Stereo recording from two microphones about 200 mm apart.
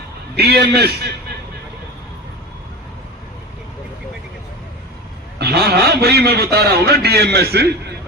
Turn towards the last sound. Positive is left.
turn(degrees=-55)  # may be behind; listen again after turning